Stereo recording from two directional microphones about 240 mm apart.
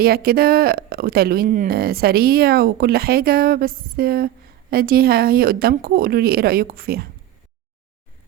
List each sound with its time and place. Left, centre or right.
0.0 s speech: right